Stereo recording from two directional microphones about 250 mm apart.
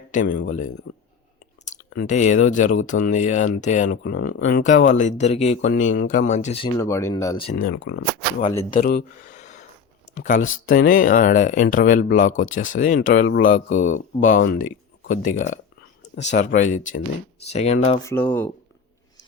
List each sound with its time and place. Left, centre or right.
0.1 s speech: left
4.6 s speech: left
7.5 s speech: left
18.0 s speech: centre